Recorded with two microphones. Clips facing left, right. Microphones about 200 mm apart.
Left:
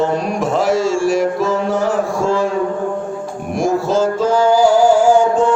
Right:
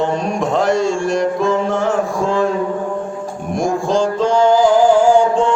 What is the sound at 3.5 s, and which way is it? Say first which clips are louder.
Music: left 1 dB; 5° left (ahead or behind).